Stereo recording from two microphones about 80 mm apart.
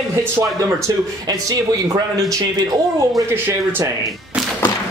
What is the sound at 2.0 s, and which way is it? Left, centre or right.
Speech, right.